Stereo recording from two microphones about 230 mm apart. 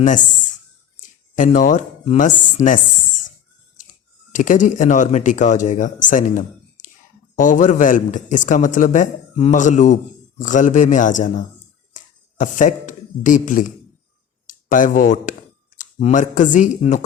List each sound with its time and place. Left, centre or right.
0.0 s speech: left